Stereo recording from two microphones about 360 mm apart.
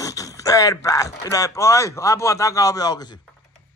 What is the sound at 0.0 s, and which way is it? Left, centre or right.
Speech, centre.